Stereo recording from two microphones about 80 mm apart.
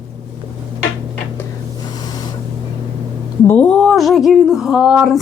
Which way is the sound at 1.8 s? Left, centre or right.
Left.